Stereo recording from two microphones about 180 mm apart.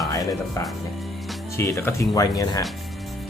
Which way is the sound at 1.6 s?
15° left (ahead or behind).